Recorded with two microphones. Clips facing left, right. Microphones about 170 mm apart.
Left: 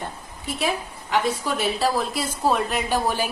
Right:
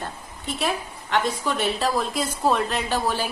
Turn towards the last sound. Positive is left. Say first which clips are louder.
# left 1 dB
turn(degrees=15)  # may be behind; listen again after turning